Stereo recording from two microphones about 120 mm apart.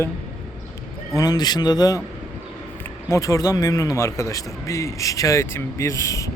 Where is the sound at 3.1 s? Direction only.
25° left (ahead or behind).